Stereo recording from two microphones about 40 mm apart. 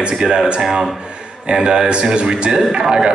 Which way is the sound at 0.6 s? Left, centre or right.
Centre.